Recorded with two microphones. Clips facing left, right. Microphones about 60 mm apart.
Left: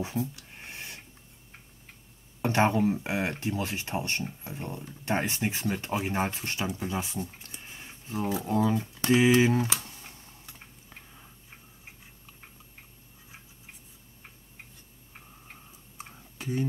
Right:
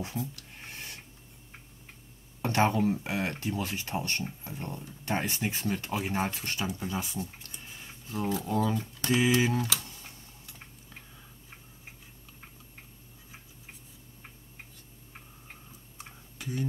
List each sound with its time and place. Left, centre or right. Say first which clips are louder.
0.7 s a sound: left 2 dB; left
2.4 s speech: left 2 dB; left
16.0 s tick-tock: left 3 dB; left